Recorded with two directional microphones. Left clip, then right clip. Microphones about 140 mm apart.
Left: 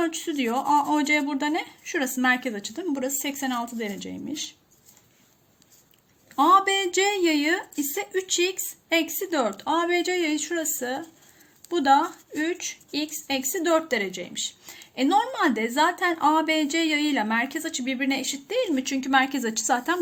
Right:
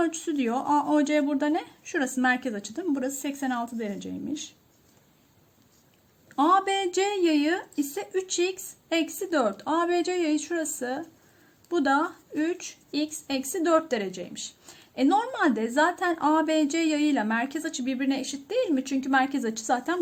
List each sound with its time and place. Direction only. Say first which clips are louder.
0.0 s a woman's voice: left 1 dB; 55° right (ahead or behind)
6.3 s a woman's voice: left 4 dB; 45° right (ahead or behind)
19.2 s a woman's voice: left 2 dB; 25° right (ahead or behind)